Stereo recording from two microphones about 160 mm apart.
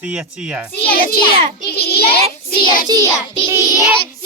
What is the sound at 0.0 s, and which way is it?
Speech, 5° right (ahead or behind).